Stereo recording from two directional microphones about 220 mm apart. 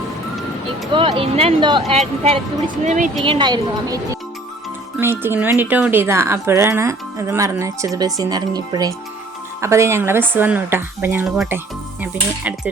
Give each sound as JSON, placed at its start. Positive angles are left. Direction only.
{"t": 0.9, "sound": "speech", "side_deg": -25}
{"t": 3.2, "sound": "speech", "side_deg": -20}
{"t": 5.2, "sound": "speech", "side_deg": -10}